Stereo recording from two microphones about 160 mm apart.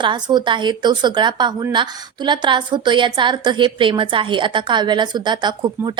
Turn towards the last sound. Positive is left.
turn(degrees=-30)  # may be behind; listen again after turning